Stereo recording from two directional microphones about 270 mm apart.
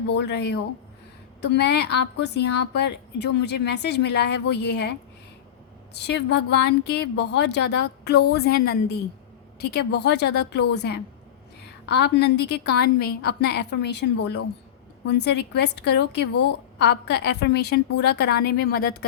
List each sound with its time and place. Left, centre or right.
0.2 s a woman's voice: left
5.9 s a woman's voice: left